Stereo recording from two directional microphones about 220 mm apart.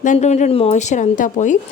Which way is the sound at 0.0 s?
35° left (ahead or behind).